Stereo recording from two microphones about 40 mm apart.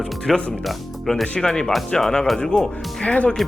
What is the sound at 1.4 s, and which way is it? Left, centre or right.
Speech, centre.